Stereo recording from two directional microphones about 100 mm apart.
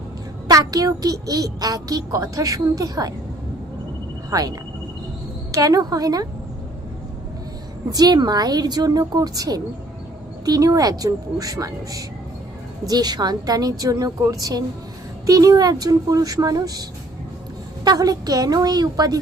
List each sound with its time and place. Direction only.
0.5 s a child's voice: 40° right (ahead or behind)
4.3 s a child's voice: 40° right (ahead or behind)
7.9 s a child's voice: 40° right (ahead or behind)
17.8 s a child's voice: 40° right (ahead or behind)